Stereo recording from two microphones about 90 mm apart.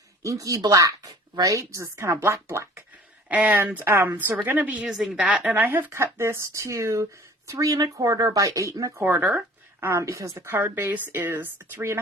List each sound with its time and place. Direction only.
0.3 s speech: 40° right (ahead or behind)
3.2 s speech: 15° right (ahead or behind)
4.9 s a woman's voice: 5° right (ahead or behind); by 8.9 s 40° right (ahead or behind)
9.0 s speech: 20° right (ahead or behind)
9.8 s speech: 30° right (ahead or behind)
10.5 s speech: 25° right (ahead or behind)